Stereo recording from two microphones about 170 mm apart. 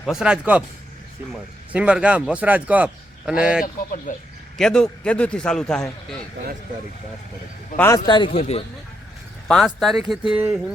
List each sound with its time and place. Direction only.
0.0 s a man's voice: 5° right (ahead or behind)
3.6 s speech: 50° left (ahead or behind)
4.5 s a man's voice: 5° left (ahead or behind)
7.8 s a man's voice: 20° left (ahead or behind)
8.4 s a man's voice: 40° left (ahead or behind)
9.5 s a man's voice: centre (ahead or behind)